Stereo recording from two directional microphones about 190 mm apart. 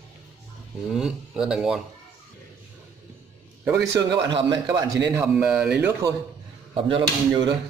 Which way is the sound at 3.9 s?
20° right (ahead or behind).